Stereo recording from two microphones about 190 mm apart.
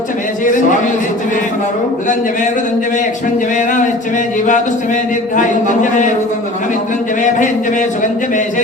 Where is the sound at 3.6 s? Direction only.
40° left (ahead or behind).